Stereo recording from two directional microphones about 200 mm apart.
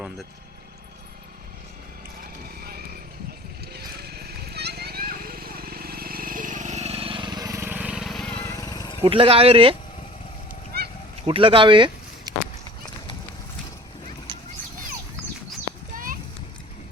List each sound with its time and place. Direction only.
2.6 s basketball bounce: 50° right (ahead or behind)
3.7 s a sound: 50° right (ahead or behind); by 9.0 s 20° left (ahead or behind)
9.0 s speech: 25° right (ahead or behind)
10.7 s honk: 50° right (ahead or behind)
11.3 s speech: 25° right (ahead or behind)